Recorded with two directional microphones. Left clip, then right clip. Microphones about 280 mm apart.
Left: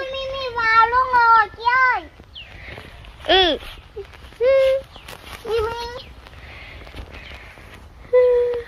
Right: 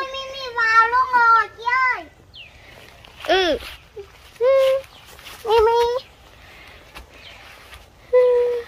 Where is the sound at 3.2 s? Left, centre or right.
Centre.